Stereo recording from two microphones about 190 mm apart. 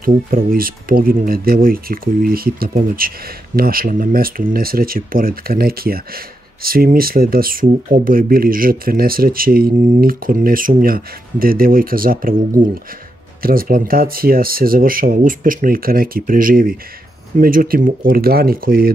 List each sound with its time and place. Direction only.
0.0 s speech: 50° right (ahead or behind)
13.4 s speech: 50° right (ahead or behind)